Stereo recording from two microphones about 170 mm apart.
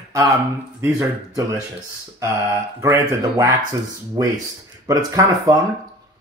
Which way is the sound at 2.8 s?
20° right (ahead or behind).